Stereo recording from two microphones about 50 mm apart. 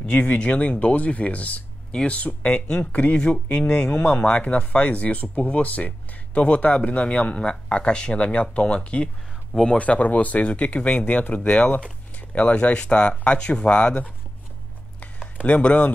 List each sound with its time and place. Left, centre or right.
0.0 s speech: centre
15.3 s speech: left